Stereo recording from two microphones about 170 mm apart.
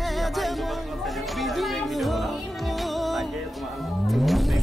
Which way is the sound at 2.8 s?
Centre (ahead or behind).